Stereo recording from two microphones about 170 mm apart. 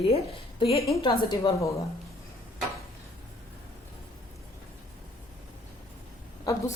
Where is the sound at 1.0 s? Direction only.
25° left (ahead or behind).